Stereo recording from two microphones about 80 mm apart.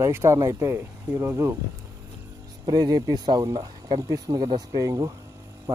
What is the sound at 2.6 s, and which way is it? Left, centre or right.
Speech, right.